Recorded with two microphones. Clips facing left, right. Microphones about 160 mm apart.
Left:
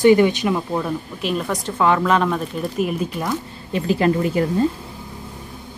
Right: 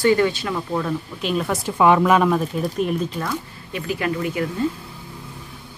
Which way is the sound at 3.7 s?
30° left (ahead or behind).